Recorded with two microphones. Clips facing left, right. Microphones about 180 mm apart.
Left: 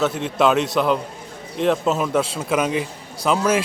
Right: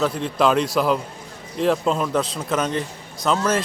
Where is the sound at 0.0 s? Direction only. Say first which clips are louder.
Left 1 dB; centre (ahead or behind).